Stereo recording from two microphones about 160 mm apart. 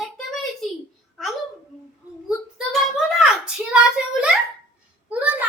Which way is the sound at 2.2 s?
5° right (ahead or behind).